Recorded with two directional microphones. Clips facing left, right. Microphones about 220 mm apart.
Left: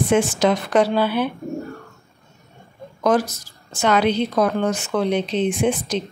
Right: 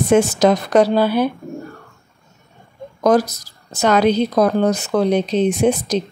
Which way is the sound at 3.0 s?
40° right (ahead or behind).